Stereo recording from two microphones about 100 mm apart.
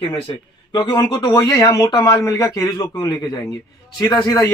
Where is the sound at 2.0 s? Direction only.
35° left (ahead or behind).